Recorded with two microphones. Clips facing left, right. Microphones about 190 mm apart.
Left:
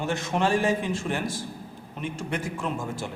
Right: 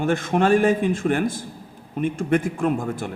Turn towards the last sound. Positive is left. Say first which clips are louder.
# right 8 dB
turn(degrees=-55)  # may be behind; listen again after turning